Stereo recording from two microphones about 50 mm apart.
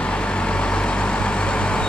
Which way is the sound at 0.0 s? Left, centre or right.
Left.